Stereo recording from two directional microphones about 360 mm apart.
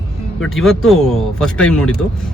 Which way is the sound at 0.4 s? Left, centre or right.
Centre.